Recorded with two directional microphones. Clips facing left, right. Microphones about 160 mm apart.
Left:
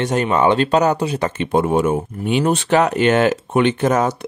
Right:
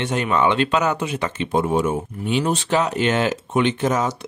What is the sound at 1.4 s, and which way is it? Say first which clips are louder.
Speech: left 3 dB; 55° left (ahead or behind).